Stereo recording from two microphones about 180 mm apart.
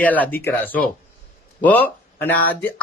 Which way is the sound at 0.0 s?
10° left (ahead or behind).